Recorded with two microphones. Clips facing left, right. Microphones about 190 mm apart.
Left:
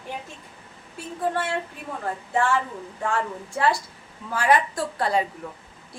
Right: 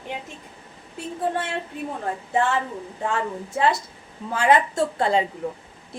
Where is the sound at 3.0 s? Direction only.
20° right (ahead or behind).